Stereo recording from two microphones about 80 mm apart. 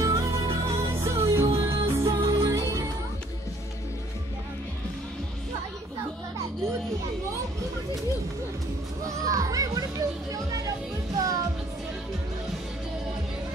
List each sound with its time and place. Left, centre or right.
0.0 s music: right
9.0 s children playing: right
11.1 s music: right